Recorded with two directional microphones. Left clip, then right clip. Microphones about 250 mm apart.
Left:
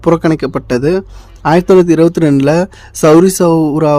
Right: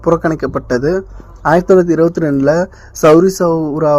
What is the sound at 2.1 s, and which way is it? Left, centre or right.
Speech, left.